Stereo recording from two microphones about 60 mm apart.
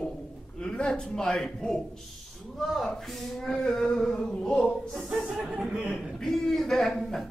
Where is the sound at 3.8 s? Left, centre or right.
Centre.